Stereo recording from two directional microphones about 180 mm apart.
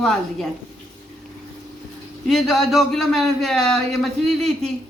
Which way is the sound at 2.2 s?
Centre (ahead or behind).